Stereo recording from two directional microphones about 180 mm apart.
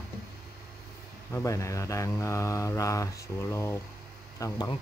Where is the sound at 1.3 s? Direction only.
15° left (ahead or behind).